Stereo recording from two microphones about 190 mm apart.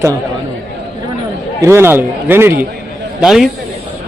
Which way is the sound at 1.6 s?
15° right (ahead or behind).